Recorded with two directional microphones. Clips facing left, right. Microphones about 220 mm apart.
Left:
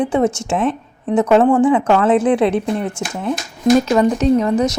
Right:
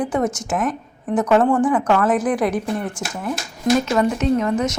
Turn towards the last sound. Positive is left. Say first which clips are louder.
# left 4 dB
turn(degrees=35)  # may be behind; listen again after turning